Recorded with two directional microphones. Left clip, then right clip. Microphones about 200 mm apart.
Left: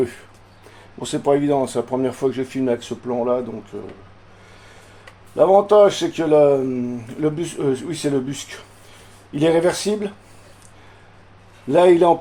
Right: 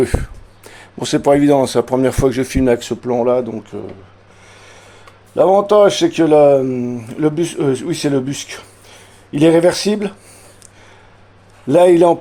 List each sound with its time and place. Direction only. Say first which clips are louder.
0.8 s speech: right 8 dB; 65° right (ahead or behind)
5.3 s speech: right 2 dB; 55° right (ahead or behind)
11.7 s speech: right 4 dB; 55° right (ahead or behind)